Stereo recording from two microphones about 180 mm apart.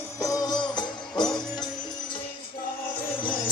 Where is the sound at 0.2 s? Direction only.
20° left (ahead or behind).